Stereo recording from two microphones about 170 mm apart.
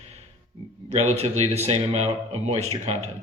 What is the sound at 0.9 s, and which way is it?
A man's voice, 40° right (ahead or behind).